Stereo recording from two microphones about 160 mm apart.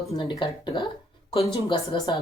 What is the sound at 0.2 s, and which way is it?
Speech, 30° left (ahead or behind).